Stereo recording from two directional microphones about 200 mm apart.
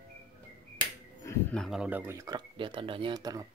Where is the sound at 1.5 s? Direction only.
Centre (ahead or behind).